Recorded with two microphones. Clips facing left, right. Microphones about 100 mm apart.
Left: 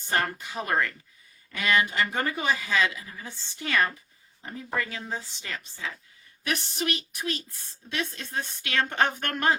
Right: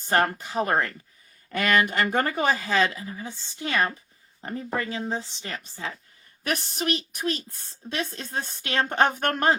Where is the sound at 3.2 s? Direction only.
20° right (ahead or behind).